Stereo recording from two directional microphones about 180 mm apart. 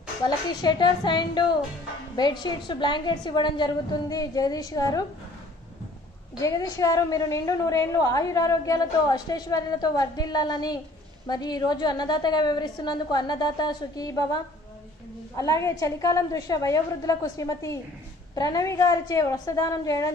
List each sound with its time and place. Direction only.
0.2 s a woman's voice: 25° left (ahead or behind)
6.4 s a woman's voice: 20° left (ahead or behind)